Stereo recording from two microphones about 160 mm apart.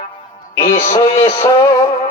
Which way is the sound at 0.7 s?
45° left (ahead or behind).